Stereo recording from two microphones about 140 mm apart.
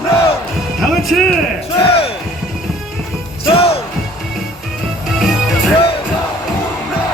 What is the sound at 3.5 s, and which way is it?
Music, 45° left (ahead or behind).